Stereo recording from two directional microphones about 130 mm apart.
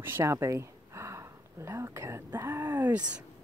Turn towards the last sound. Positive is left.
turn(degrees=-10)  # may be behind; listen again after turning